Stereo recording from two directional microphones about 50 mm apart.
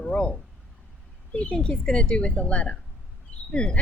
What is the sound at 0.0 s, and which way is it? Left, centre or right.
A woman's voice, centre.